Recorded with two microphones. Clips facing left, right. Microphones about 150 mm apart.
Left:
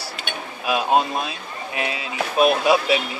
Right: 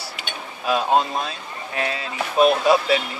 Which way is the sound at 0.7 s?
10° left (ahead or behind).